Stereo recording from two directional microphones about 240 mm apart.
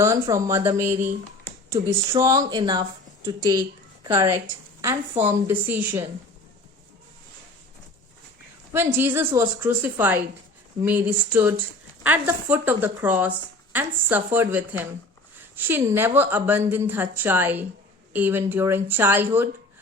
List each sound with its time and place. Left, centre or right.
0.0 s a woman's voice: centre
8.7 s a woman's voice: centre